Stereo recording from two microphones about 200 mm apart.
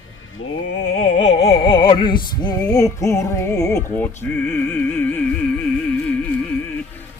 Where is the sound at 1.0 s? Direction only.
35° left (ahead or behind); by 5.2 s 10° left (ahead or behind).